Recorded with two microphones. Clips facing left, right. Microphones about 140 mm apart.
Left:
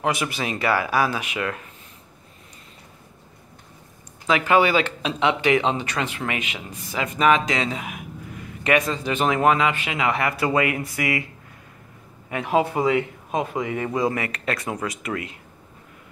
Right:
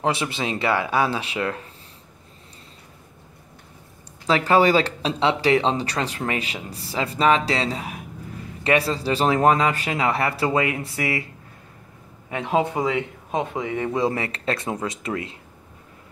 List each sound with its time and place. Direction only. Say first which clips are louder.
0.0 s speech: right 1 dB; 30° right (ahead or behind)
4.3 s speech: right 1 dB; 35° right (ahead or behind)
12.7 s speech: left 3 dB; 10° left (ahead or behind)
13.3 s speech: even; 25° right (ahead or behind)